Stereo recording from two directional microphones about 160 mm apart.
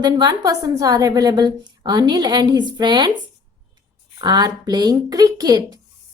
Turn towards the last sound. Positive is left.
turn(degrees=-25)  # may be behind; listen again after turning